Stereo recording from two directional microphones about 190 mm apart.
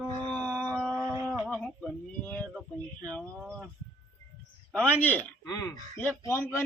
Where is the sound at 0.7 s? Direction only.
5° right (ahead or behind).